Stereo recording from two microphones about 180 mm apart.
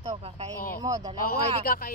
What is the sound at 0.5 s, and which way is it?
Speech, 55° left (ahead or behind).